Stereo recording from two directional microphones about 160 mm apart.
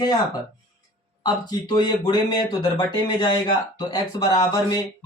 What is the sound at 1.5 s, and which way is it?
Speech, 25° left (ahead or behind).